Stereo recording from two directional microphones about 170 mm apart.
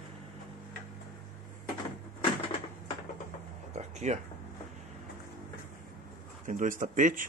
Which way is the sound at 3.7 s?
45° right (ahead or behind).